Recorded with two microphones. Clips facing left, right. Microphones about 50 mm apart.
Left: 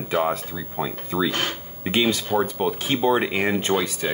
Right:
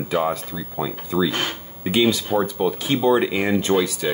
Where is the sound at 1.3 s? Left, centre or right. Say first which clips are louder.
Right 1 dB; centre.